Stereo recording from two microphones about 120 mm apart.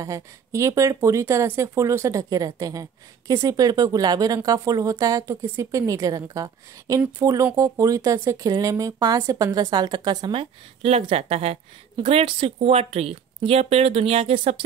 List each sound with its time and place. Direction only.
0.0 s speech: 25° right (ahead or behind); by 14.6 s 55° right (ahead or behind)